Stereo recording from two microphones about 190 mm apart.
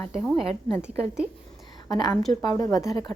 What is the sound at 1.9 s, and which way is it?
Speech, 20° left (ahead or behind).